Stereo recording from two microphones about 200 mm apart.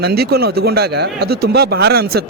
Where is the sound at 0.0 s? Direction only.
50° right (ahead or behind).